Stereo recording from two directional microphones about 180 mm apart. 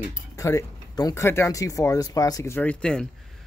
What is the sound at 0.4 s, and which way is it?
Speech, 20° left (ahead or behind).